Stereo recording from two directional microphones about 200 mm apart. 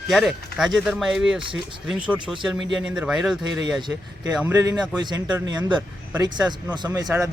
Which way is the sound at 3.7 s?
20° right (ahead or behind).